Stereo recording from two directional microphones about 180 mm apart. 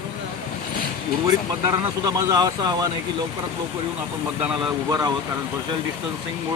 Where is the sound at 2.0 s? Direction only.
20° right (ahead or behind).